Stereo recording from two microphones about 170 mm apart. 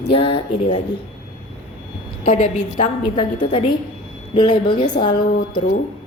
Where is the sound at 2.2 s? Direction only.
50° left (ahead or behind).